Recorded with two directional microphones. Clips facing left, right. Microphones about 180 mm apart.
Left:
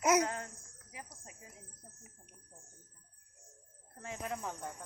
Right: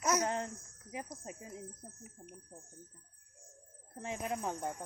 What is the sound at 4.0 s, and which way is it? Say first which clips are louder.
Speech: right 3 dB; 20° right (ahead or behind).